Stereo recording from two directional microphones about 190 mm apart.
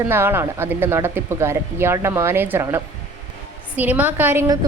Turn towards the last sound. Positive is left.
turn(degrees=-15)  # may be behind; listen again after turning